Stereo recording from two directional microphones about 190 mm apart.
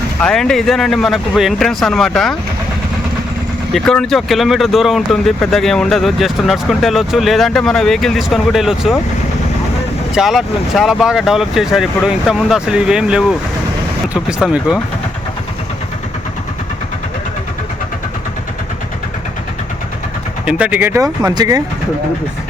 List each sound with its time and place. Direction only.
0.2 s speech: 5° left (ahead or behind)
3.7 s speech: centre (ahead or behind)
10.2 s speech: centre (ahead or behind)
20.4 s speech: 5° right (ahead or behind)